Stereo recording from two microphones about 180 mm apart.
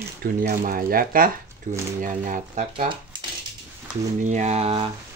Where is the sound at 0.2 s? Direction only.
55° right (ahead or behind).